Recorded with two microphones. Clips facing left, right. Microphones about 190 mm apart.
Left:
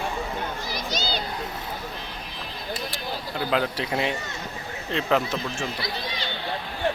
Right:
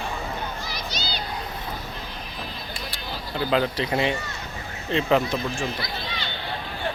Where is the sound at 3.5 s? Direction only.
5° left (ahead or behind).